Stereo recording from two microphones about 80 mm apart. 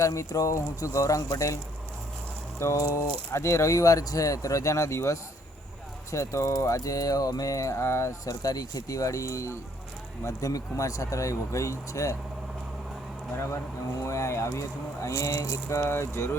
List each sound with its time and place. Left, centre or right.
0.0 s speech: left
2.6 s speech: left
13.3 s speech: left